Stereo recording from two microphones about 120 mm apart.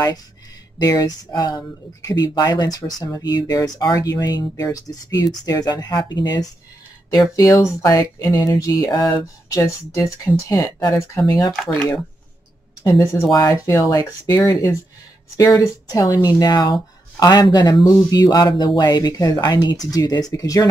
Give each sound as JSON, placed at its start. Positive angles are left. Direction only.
{"t": 0.7, "sound": "speech", "side_deg": 35}
{"t": 13.4, "sound": "speech", "side_deg": 30}